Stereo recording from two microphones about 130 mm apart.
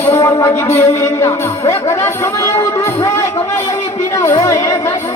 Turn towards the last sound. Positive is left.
turn(degrees=25)  # may be behind; listen again after turning